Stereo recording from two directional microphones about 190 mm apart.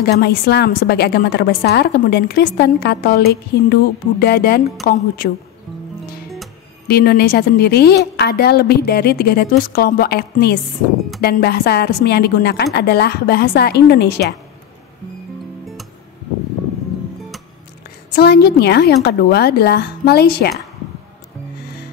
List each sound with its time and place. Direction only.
0.0 s a woman's voice: 55° left (ahead or behind)
6.9 s a woman's voice: 55° left (ahead or behind)
18.1 s a woman's voice: 55° left (ahead or behind)